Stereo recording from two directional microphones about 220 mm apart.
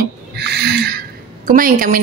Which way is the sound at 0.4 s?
50° right (ahead or behind).